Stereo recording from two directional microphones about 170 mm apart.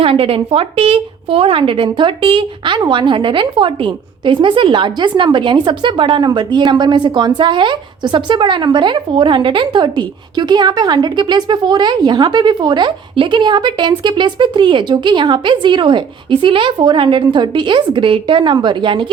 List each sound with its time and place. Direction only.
0.0 s a woman's voice: 35° right (ahead or behind)